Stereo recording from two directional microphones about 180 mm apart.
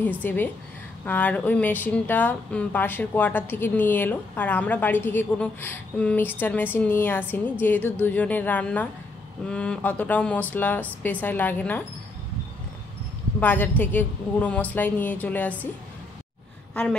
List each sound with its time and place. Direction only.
0.2 s a woman's voice: 10° left (ahead or behind)
13.4 s a woman's voice: 10° left (ahead or behind)